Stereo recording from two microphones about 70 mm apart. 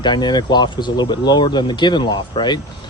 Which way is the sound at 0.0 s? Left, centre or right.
Left.